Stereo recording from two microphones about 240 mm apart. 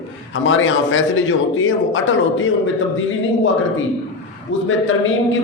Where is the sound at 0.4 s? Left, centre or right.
Left.